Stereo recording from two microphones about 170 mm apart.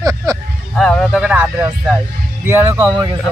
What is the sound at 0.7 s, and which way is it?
Speech, 5° left (ahead or behind).